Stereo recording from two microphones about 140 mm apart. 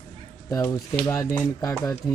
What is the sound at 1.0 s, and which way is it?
Speech, 25° left (ahead or behind).